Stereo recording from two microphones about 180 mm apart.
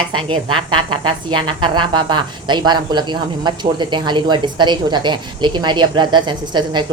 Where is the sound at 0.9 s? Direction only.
25° right (ahead or behind).